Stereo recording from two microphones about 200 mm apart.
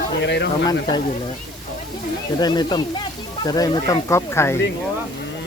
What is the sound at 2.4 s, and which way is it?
Speech, 20° left (ahead or behind).